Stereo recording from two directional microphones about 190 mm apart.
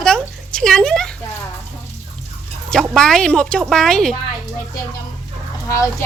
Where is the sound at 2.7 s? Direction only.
Centre (ahead or behind).